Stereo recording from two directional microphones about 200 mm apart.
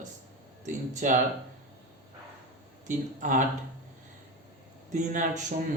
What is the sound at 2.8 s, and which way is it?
Speech, 40° right (ahead or behind).